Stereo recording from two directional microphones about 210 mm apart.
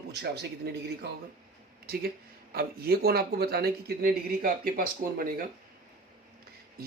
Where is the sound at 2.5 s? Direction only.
45° right (ahead or behind).